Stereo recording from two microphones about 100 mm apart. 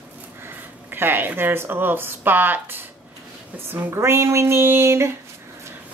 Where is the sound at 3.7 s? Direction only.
30° right (ahead or behind).